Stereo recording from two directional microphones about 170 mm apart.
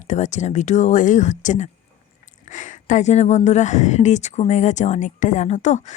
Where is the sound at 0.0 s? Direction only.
45° left (ahead or behind).